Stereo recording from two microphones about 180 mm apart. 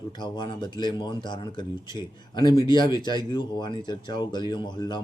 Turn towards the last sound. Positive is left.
turn(degrees=25)  # may be behind; listen again after turning